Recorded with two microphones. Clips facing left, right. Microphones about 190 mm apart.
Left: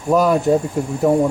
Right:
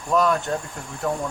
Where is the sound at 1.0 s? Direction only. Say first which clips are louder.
Left 10 dB; 25° left (ahead or behind).